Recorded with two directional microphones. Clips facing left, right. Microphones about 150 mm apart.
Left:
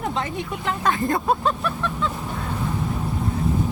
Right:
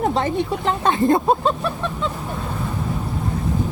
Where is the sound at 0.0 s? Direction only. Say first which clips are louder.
Right 7 dB; 35° right (ahead or behind).